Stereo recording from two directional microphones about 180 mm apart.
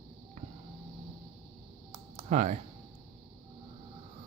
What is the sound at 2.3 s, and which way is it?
Speech, 40° right (ahead or behind).